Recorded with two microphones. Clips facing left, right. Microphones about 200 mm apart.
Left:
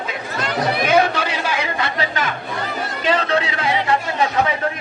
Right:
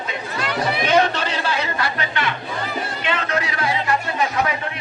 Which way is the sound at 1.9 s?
40° left (ahead or behind).